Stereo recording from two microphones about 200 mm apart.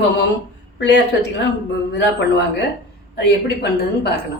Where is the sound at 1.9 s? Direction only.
60° left (ahead or behind).